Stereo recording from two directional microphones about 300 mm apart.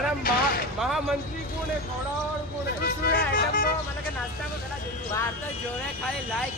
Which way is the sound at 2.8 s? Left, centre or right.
Left.